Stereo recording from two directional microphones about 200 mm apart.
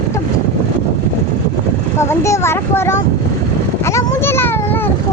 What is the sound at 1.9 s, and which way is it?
A child's voice, 15° left (ahead or behind).